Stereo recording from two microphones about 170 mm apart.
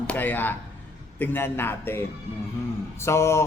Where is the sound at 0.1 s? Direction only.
10° left (ahead or behind).